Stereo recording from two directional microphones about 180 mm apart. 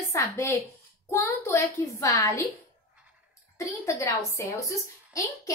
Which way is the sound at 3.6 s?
15° left (ahead or behind).